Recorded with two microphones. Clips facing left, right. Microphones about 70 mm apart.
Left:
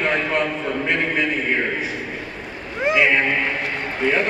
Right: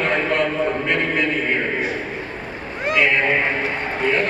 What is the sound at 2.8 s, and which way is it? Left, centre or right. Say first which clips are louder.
Cat: left 1 dB; centre.